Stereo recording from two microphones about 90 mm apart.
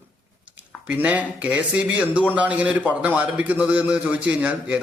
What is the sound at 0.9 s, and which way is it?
A man's voice, 15° right (ahead or behind).